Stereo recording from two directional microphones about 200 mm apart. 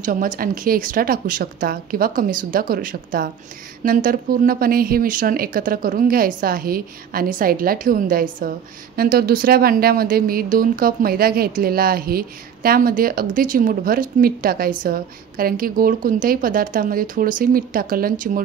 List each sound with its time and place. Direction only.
0.0 s a woman's voice: 45° right (ahead or behind)